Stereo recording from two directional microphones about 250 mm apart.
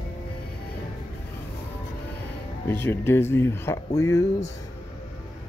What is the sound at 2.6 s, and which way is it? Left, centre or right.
Speech, centre.